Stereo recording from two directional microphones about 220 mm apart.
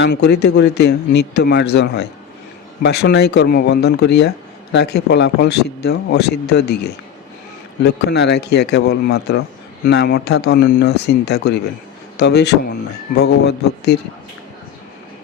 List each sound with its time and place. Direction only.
0.0 s speech: 50° left (ahead or behind)